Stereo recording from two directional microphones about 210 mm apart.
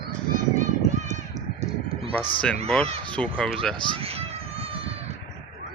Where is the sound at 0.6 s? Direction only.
35° right (ahead or behind).